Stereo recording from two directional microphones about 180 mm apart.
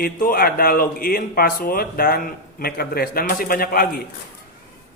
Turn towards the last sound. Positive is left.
turn(degrees=55)  # may be behind; listen again after turning